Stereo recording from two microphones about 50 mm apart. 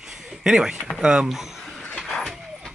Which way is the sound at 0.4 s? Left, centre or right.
Centre.